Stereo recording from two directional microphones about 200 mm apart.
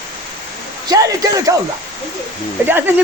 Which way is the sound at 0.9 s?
15° right (ahead or behind).